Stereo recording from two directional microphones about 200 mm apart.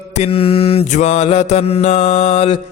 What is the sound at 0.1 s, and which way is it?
Music, 30° left (ahead or behind).